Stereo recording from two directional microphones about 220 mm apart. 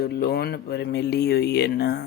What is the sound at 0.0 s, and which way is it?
Speech, 45° left (ahead or behind).